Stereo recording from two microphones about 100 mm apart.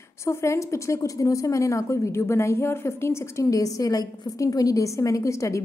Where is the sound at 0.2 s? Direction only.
30° left (ahead or behind).